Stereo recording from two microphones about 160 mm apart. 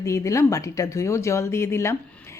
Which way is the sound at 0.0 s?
20° left (ahead or behind).